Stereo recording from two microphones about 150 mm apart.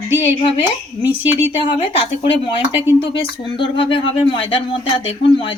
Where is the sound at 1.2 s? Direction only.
35° left (ahead or behind).